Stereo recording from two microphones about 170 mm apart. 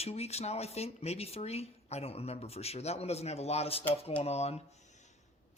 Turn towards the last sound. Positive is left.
turn(degrees=45)  # may be behind; listen again after turning